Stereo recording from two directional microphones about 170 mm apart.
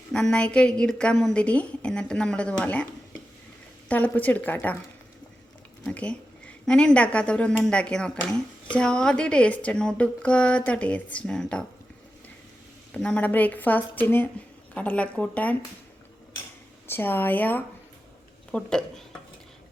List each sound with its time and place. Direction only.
0.1 s a woman's voice: 5° left (ahead or behind)
5.8 s speech: 5° left (ahead or behind)
12.9 s speech: 5° left (ahead or behind)
16.8 s a woman's voice: 10° left (ahead or behind)